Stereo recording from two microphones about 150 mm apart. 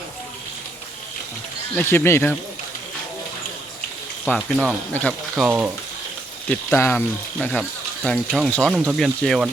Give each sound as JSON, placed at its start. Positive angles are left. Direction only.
{"t": 1.7, "sound": "speech", "side_deg": 15}
{"t": 4.4, "sound": "speech", "side_deg": 0}
{"t": 5.5, "sound": "speech", "side_deg": -10}
{"t": 6.5, "sound": "speech", "side_deg": 10}